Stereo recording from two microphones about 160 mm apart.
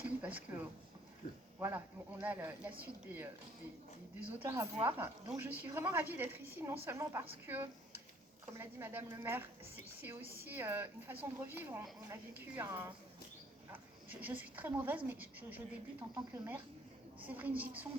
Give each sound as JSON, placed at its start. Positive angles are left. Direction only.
{"t": 0.0, "sound": "a sound", "side_deg": -10}
{"t": 1.5, "sound": "a woman's voice", "side_deg": -15}
{"t": 14.1, "sound": "a woman's voice", "side_deg": -10}